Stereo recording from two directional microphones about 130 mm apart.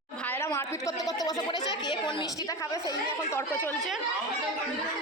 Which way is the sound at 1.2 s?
35° left (ahead or behind).